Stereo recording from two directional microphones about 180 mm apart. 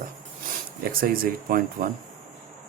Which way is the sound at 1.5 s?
50° right (ahead or behind).